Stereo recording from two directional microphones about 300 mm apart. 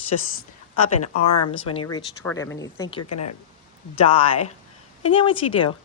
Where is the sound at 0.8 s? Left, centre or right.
Left.